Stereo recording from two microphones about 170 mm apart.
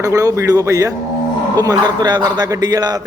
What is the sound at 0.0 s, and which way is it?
A man's voice, 20° right (ahead or behind).